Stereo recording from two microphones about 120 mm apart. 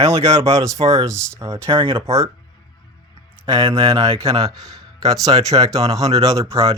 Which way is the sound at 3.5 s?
45° right (ahead or behind).